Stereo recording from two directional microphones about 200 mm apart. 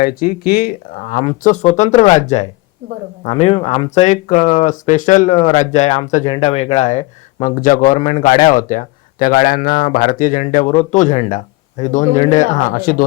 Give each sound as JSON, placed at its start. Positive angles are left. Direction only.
{"t": 0.0, "sound": "speech", "side_deg": 45}